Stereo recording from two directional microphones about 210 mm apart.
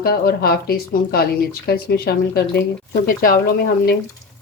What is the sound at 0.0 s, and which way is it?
Speech, 45° left (ahead or behind).